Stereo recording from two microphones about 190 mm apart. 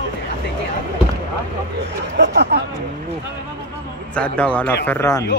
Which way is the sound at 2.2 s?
60° right (ahead or behind).